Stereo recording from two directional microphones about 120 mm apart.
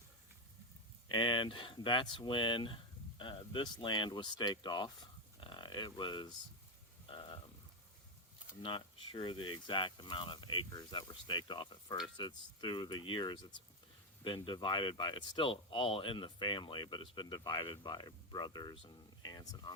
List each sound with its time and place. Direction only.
1.0 s speech: 40° left (ahead or behind)
7.1 s a sound: 40° left (ahead or behind)
8.6 s speech: 45° left (ahead or behind)